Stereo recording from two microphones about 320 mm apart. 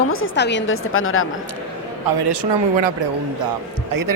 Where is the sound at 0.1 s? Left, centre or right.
Left.